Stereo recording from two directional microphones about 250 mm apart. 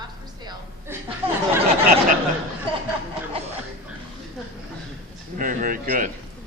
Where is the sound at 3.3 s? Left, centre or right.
Right.